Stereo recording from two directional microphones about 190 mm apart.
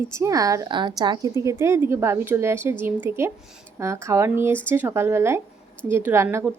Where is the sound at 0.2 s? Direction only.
15° right (ahead or behind).